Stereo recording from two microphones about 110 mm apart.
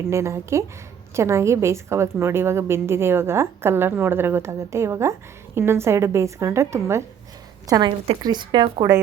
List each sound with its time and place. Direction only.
0.1 s a woman's voice: 25° right (ahead or behind)
7.7 s a woman's voice: 40° right (ahead or behind)